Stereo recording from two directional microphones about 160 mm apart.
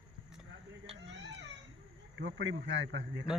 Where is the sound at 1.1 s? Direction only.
90° right.